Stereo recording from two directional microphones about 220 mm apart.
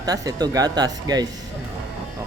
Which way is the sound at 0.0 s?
15° right (ahead or behind).